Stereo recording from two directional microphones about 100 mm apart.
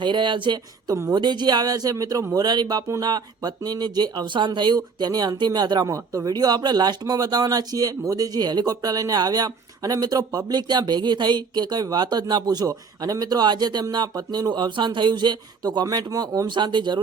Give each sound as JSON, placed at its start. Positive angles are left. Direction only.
{"t": 0.0, "sound": "speech", "side_deg": -55}